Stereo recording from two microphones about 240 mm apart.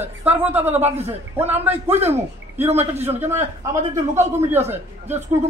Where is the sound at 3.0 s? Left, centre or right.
Centre.